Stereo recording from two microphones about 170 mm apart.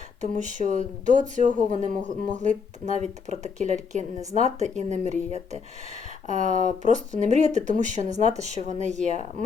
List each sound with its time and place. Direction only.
0.2 s speech: 45° right (ahead or behind)